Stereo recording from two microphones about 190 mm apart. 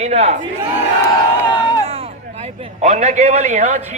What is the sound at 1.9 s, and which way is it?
A man's voice, 35° right (ahead or behind).